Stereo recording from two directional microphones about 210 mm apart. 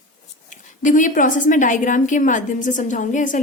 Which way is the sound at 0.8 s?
35° left (ahead or behind).